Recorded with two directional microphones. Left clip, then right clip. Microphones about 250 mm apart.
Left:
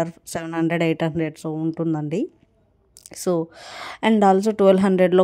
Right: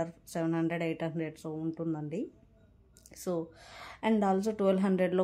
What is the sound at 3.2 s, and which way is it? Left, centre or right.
A woman's voice, left.